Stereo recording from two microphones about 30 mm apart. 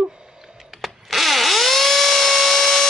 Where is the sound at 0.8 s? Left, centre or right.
Centre.